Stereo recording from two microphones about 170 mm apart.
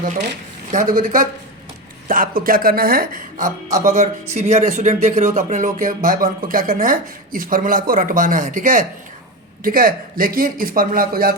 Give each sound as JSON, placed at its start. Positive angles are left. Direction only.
{"t": 0.7, "sound": "a woman's voice", "side_deg": -50}